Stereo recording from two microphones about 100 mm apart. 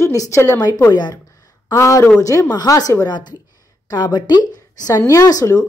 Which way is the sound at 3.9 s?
45° left (ahead or behind).